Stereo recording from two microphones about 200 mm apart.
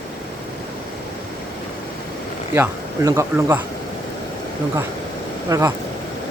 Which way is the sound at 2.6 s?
15° right (ahead or behind).